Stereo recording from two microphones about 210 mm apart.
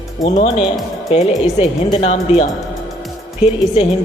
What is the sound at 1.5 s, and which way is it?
Speech, 30° left (ahead or behind).